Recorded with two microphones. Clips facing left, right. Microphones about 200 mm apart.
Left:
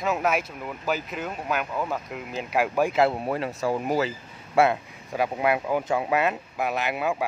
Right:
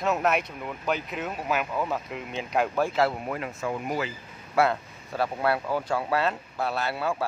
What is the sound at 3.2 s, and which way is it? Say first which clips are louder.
Speech: left 4 dB; 30° left (ahead or behind).